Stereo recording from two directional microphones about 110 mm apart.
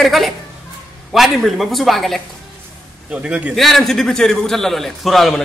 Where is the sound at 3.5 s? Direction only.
Centre (ahead or behind).